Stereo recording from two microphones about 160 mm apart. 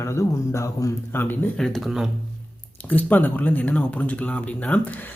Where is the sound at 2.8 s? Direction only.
10° left (ahead or behind).